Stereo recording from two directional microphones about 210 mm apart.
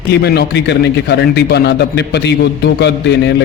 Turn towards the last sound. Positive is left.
turn(degrees=55)  # may be behind; listen again after turning